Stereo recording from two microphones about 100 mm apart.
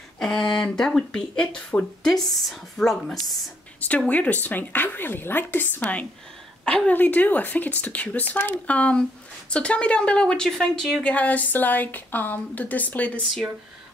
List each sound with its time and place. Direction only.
0.2 s a woman's voice: 5° left (ahead or behind)
4.1 s a woman's voice: 15° left (ahead or behind)